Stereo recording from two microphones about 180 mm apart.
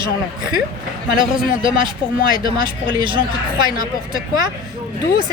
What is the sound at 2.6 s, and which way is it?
A woman's voice, 25° right (ahead or behind).